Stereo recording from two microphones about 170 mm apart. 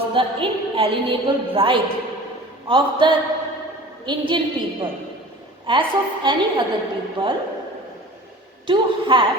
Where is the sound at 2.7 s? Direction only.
30° right (ahead or behind).